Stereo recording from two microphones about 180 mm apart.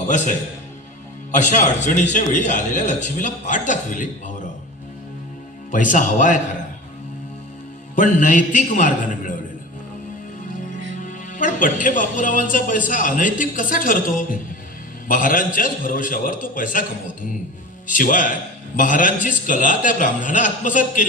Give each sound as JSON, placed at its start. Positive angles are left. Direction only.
{"t": 1.3, "sound": "speech", "side_deg": 40}
{"t": 5.7, "sound": "speech", "side_deg": 45}
{"t": 7.9, "sound": "speech", "side_deg": 45}
{"t": 11.0, "sound": "speech", "side_deg": 45}
{"t": 17.8, "sound": "speech", "side_deg": 45}